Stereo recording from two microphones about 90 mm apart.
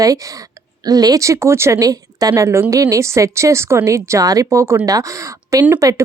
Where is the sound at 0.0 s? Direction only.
40° right (ahead or behind).